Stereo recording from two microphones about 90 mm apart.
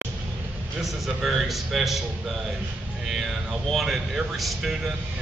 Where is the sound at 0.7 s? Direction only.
Centre (ahead or behind).